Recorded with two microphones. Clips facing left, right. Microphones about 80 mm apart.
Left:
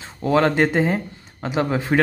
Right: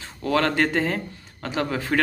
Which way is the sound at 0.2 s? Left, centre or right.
Centre.